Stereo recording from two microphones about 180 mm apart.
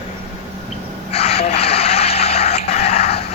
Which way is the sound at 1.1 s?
35° left (ahead or behind).